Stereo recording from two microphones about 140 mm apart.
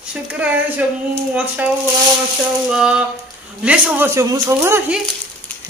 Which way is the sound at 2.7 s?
5° right (ahead or behind).